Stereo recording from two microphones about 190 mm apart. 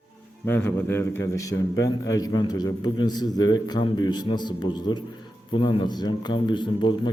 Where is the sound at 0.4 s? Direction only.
10° left (ahead or behind).